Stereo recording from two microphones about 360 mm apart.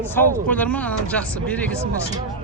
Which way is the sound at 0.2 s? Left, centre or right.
Centre.